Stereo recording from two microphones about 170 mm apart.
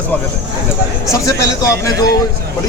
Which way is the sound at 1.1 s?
20° left (ahead or behind).